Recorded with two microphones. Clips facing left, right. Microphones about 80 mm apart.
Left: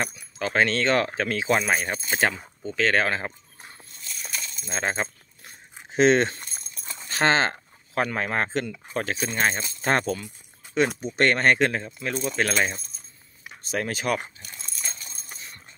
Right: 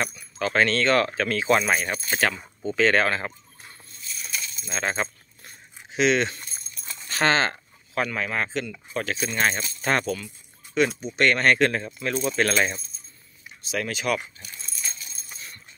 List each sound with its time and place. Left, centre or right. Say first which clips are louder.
0.0 s speech: right 1 dB; centre
1.9 s speech: even; left
2.6 s speech: right 3 dB; centre
3.0 s speech: right 1 dB; centre
4.6 s speech: even; centre
5.9 s speech: left 3 dB; left; by 12.4 s centre
13.4 s a sound: left 3 dB; left
13.7 s speech: even; left
14.4 s dog: even; left